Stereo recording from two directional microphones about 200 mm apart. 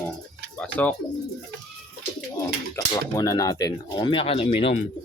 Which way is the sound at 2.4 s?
15° left (ahead or behind).